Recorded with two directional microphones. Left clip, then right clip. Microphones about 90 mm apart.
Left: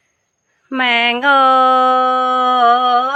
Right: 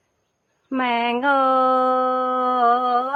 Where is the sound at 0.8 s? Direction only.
20° left (ahead or behind).